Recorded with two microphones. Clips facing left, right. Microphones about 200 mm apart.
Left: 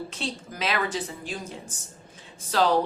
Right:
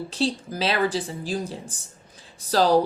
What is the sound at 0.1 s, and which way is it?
A woman's voice, 35° right (ahead or behind).